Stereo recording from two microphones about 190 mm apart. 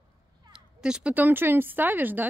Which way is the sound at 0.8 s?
5° right (ahead or behind).